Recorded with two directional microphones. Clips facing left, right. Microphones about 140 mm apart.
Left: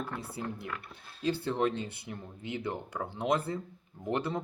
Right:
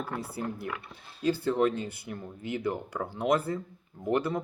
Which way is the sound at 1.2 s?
25° left (ahead or behind).